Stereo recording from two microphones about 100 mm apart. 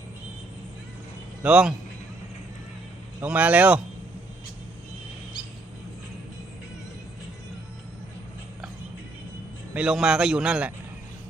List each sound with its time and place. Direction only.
1.4 s a man's voice: 10° right (ahead or behind)
3.2 s a man's voice: 15° right (ahead or behind)
9.7 s a man's voice: 10° right (ahead or behind)